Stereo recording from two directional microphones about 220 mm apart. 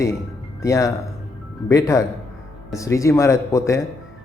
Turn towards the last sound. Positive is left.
turn(degrees=15)  # may be behind; listen again after turning